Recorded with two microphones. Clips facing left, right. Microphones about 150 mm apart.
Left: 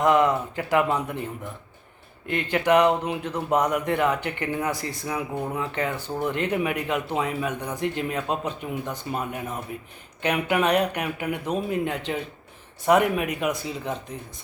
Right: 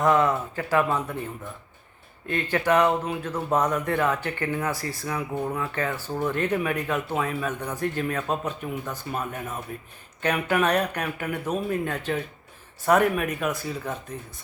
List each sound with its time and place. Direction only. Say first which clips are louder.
0.0 s speech: left 1 dB; 15° left (ahead or behind)
2.2 s speech: left 1 dB; 15° left (ahead or behind)